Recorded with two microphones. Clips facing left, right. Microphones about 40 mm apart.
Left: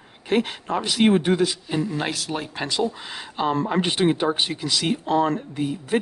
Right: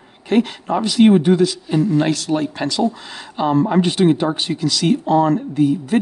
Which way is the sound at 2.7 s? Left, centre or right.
Centre.